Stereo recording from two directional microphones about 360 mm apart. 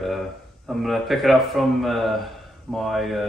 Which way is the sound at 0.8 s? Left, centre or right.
Centre.